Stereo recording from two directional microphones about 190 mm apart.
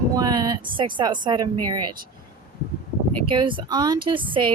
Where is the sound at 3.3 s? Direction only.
25° right (ahead or behind).